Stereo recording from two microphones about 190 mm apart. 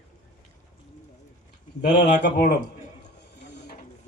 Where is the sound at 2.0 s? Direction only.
65° left (ahead or behind).